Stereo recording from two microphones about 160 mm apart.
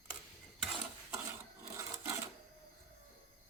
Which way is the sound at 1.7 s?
15° right (ahead or behind).